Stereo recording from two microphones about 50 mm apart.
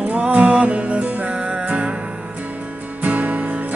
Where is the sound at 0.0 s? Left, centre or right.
Right.